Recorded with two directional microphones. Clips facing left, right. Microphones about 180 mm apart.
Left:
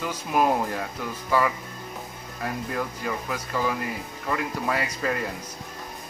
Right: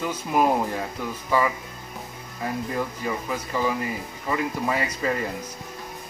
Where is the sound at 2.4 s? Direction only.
5° right (ahead or behind).